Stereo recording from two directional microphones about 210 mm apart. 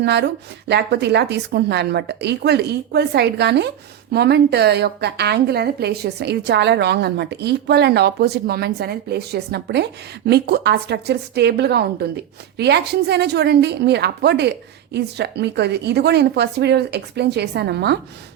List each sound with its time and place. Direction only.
0.0 s a woman's voice: 50° right (ahead or behind)